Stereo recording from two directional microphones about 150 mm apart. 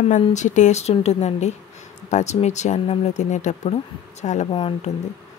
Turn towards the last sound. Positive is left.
turn(degrees=35)  # may be behind; listen again after turning